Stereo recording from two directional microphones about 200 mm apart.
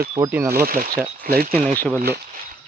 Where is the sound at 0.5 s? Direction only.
45° right (ahead or behind).